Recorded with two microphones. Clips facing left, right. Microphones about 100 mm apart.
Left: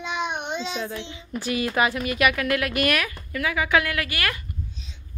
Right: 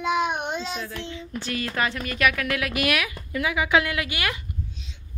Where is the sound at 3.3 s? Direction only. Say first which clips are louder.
Right 1 dB; 20° right (ahead or behind).